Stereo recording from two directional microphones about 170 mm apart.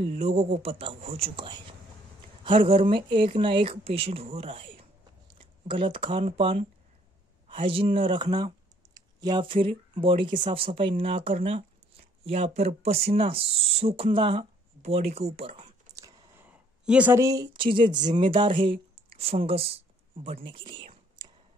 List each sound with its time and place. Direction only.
0.0 s speech: 40° right (ahead or behind)
15.9 s speech: 20° right (ahead or behind)